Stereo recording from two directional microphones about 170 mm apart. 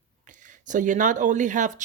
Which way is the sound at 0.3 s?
50° right (ahead or behind).